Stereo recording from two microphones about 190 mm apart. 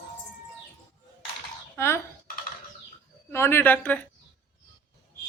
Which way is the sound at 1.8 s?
15° left (ahead or behind).